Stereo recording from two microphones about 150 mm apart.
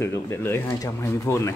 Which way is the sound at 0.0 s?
20° left (ahead or behind).